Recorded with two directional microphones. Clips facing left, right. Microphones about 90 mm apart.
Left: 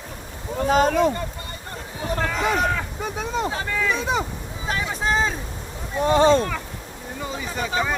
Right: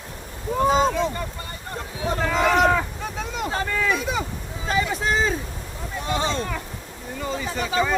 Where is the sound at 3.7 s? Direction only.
Centre (ahead or behind).